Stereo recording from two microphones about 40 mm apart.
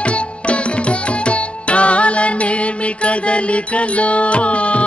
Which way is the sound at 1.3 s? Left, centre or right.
Left.